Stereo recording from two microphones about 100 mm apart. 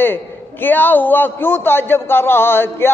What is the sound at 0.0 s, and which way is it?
A man's voice, 20° left (ahead or behind).